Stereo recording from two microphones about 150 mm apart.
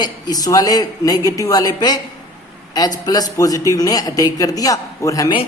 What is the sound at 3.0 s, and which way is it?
Speech, 25° left (ahead or behind).